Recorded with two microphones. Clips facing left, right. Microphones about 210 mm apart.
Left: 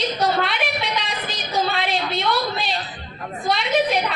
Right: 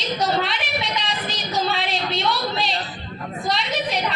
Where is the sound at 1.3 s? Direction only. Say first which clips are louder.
Left 1 dB; 55° left (ahead or behind).